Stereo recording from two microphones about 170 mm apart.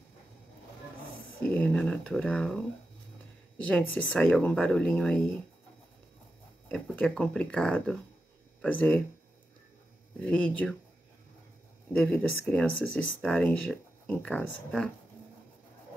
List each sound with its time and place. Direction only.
1.6 s speech: 5° left (ahead or behind)
6.7 s speech: 5° left (ahead or behind)
10.2 s speech: 10° left (ahead or behind)
11.9 s speech: 5° left (ahead or behind)